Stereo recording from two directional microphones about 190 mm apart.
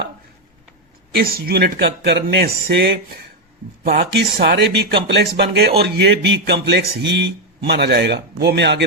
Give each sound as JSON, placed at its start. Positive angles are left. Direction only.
{"t": 1.1, "sound": "speech", "side_deg": -50}